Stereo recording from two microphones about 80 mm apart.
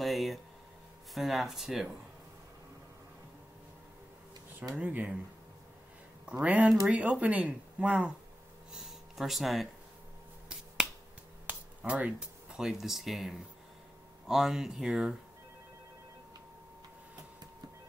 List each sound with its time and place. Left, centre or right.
0.0 s a sound: centre
1.1 s speech: centre
4.7 s speech: centre
6.4 s speech: centre
8.7 s speech: centre
11.4 s a sound: centre
12.5 s speech: centre